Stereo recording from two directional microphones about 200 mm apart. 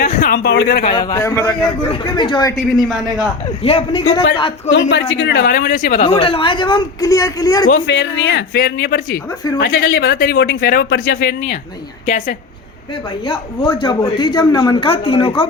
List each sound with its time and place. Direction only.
0.0 s speech: 45° left (ahead or behind)
0.9 s speech: 15° left (ahead or behind)
1.9 s a man's voice: 25° left (ahead or behind)
3.6 s a man's voice: 30° left (ahead or behind)
4.7 s a woman's voice: 60° left (ahead or behind); by 6.0 s 45° left (ahead or behind)
6.0 s a man's voice: 25° left (ahead or behind)
7.7 s speech: 60° left (ahead or behind)
13.2 s a man's voice: 20° left (ahead or behind)